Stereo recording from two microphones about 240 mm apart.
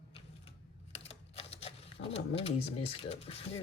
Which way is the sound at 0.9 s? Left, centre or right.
Left.